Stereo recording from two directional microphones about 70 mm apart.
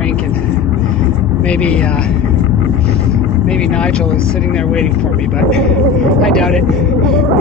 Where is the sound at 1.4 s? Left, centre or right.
Centre.